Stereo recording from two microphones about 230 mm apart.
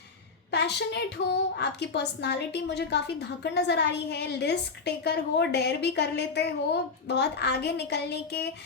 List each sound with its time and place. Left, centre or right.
0.5 s a woman's voice: left